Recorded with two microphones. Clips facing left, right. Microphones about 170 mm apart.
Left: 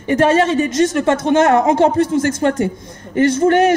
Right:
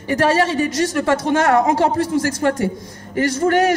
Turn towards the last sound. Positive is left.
turn(degrees=25)  # may be behind; listen again after turning